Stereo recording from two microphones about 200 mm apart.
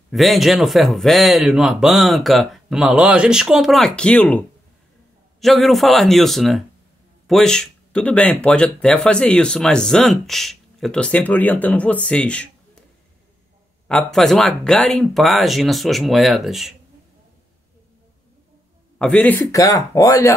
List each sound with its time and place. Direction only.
0.1 s speech: centre (ahead or behind)
13.8 s speech: 5° left (ahead or behind)
18.9 s speech: 5° left (ahead or behind)